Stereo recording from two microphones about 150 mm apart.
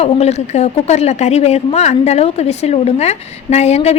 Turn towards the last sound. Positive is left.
turn(degrees=45)  # may be behind; listen again after turning